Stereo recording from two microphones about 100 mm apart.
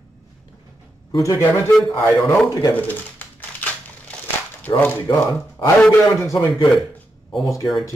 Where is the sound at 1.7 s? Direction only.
5° left (ahead or behind).